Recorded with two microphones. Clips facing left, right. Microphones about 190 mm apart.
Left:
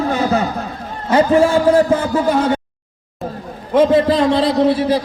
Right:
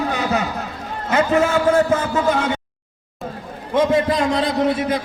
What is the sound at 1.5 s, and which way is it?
Speech, 40° left (ahead or behind).